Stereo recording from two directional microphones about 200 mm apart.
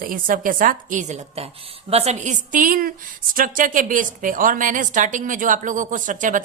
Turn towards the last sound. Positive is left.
turn(degrees=-40)  # may be behind; listen again after turning